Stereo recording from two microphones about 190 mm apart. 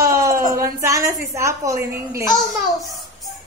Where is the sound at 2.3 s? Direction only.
Centre (ahead or behind).